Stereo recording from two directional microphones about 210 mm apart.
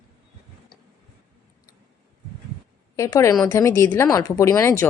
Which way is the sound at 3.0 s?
15° left (ahead or behind).